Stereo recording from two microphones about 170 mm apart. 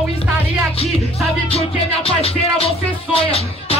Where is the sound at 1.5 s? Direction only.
35° left (ahead or behind).